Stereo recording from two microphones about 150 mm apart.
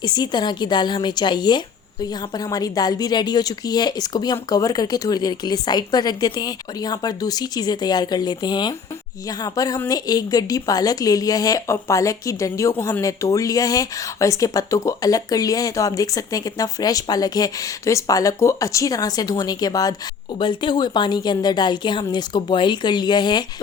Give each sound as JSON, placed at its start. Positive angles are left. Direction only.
{"t": 0.0, "sound": "a woman's voice", "side_deg": 30}